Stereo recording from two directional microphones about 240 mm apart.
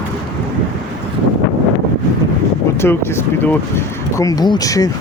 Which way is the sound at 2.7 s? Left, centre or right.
Centre.